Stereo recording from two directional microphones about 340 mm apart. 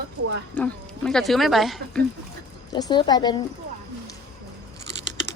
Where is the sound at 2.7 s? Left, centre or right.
Centre.